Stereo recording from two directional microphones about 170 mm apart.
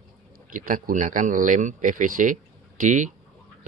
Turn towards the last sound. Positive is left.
turn(degrees=-50)  # may be behind; listen again after turning